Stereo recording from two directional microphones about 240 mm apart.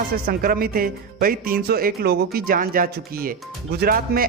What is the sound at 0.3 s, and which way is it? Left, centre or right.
Speech, right.